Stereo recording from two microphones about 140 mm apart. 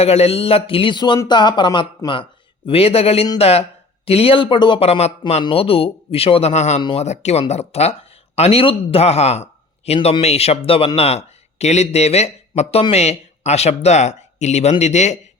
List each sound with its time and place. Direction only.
0.0 s a man's voice: 50° left (ahead or behind)